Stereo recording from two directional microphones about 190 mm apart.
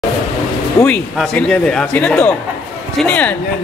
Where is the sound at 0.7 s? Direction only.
5° left (ahead or behind).